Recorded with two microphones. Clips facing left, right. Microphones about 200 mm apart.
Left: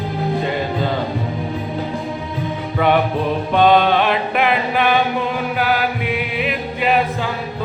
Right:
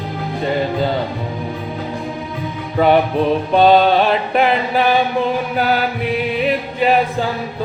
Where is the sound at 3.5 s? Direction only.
35° right (ahead or behind).